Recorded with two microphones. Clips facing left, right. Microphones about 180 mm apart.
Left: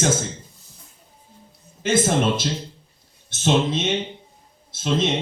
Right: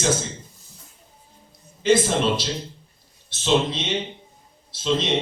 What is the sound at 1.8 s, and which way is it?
Speech, 50° left (ahead or behind).